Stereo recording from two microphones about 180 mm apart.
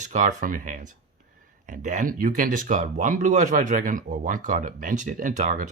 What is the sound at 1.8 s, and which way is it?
Speech, 45° right (ahead or behind).